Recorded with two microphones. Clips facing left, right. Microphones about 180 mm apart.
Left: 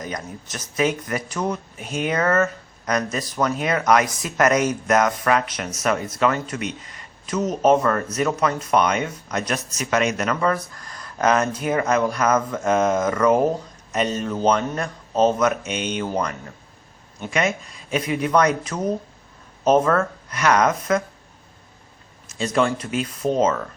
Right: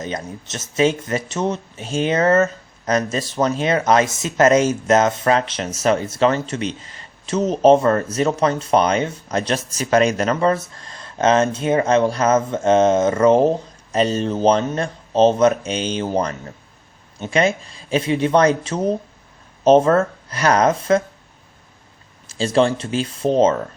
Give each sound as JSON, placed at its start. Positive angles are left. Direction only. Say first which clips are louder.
{"t": 0.0, "sound": "speech", "louder": "right 4 dB", "side_deg": -25}
{"t": 22.3, "sound": "speech", "louder": "right 4 dB", "side_deg": -30}